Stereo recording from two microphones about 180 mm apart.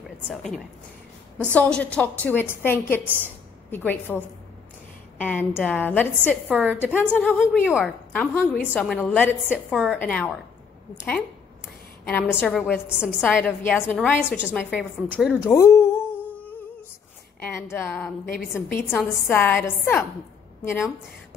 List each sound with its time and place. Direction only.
0.3 s a woman's voice: 5° left (ahead or behind)
5.2 s a woman's voice: 10° left (ahead or behind)
6.5 s a woman's voice: 10° right (ahead or behind)
6.8 s a woman's voice: 10° left (ahead or behind)
7.6 s a woman's voice: 5° right (ahead or behind)
8.1 s a woman's voice: 10° left (ahead or behind)
12.0 s a woman's voice: 10° left (ahead or behind)
12.8 s a woman's voice: 5° right (ahead or behind)
13.2 s a woman's voice: 10° left (ahead or behind)
15.5 s humming: 15° left (ahead or behind)
17.4 s a woman's voice: 15° left (ahead or behind)
18.2 s a woman's voice: 55° left (ahead or behind)
18.5 s a woman's voice: 10° left (ahead or behind)